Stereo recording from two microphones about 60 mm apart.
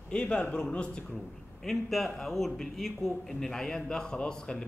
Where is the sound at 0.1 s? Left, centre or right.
Centre.